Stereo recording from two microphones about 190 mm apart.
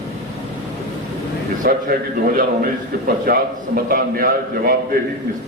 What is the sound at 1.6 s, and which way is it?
A man's voice, 50° right (ahead or behind).